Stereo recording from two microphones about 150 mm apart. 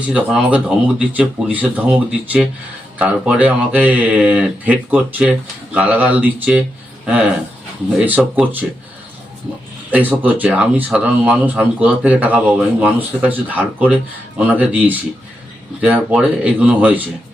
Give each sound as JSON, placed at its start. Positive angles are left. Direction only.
{"t": 0.0, "sound": "speech", "side_deg": -10}
{"t": 7.9, "sound": "speech", "side_deg": -10}
{"t": 9.9, "sound": "speech", "side_deg": -10}